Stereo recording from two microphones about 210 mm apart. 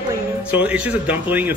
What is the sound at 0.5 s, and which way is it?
Speech, 5° right (ahead or behind).